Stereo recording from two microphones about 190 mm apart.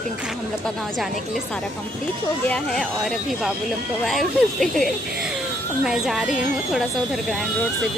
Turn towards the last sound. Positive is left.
turn(degrees=0)  # may be behind; listen again after turning